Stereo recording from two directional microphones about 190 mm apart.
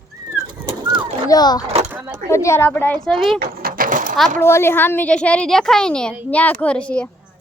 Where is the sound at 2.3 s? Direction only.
15° left (ahead or behind).